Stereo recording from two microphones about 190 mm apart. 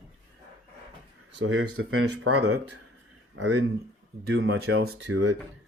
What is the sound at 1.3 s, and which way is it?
Speech, 80° right.